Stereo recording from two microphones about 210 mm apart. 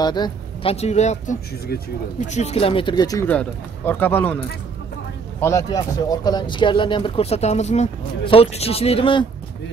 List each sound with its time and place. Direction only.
0.0 s speech: 20° left (ahead or behind)
5.4 s speech: 15° left (ahead or behind)